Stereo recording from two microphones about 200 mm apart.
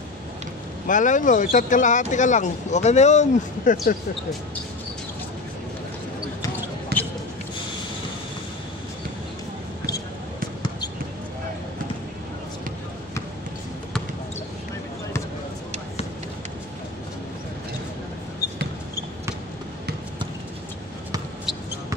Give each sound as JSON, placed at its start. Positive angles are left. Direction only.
{"t": 0.8, "sound": "speech", "side_deg": 40}
{"t": 6.9, "sound": "basketball bounce", "side_deg": -50}